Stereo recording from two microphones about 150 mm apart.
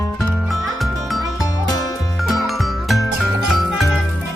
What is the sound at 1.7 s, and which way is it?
Music, 25° left (ahead or behind).